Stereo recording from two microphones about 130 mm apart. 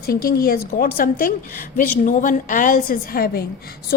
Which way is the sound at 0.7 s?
90° left.